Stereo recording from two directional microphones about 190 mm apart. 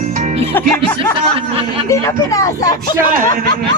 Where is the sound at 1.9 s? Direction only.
15° left (ahead or behind).